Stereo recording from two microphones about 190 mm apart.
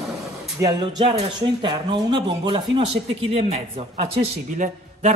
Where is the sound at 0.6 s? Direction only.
20° right (ahead or behind).